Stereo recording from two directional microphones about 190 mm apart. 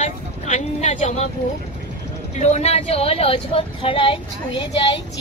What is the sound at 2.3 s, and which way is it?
Speech, 35° left (ahead or behind).